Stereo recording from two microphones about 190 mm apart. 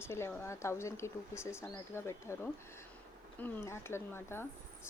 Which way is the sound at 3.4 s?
15° left (ahead or behind).